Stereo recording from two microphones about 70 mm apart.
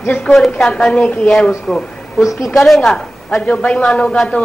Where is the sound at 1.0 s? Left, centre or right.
Left.